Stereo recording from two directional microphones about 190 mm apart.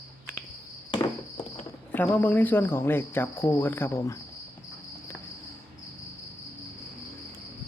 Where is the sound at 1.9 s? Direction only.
10° left (ahead or behind).